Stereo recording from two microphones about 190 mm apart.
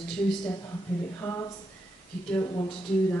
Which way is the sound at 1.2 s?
15° left (ahead or behind).